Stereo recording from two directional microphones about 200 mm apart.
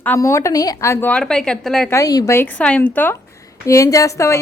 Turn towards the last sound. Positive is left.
turn(degrees=15)  # may be behind; listen again after turning